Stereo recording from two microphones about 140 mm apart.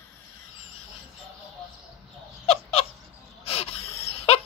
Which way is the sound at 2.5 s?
45° left (ahead or behind).